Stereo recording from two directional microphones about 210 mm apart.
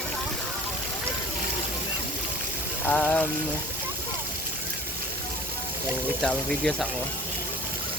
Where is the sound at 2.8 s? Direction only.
10° left (ahead or behind).